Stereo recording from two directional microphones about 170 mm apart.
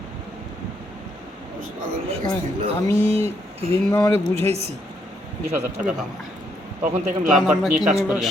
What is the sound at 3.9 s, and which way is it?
Speech, 15° left (ahead or behind).